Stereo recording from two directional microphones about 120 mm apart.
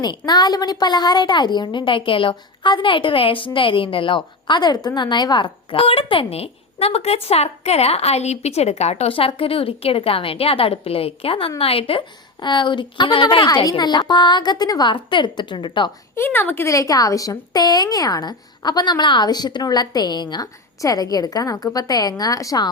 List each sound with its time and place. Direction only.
0.0 s speech: 35° left (ahead or behind)
5.7 s a woman's voice: 50° left (ahead or behind)
16.1 s speech: 20° left (ahead or behind)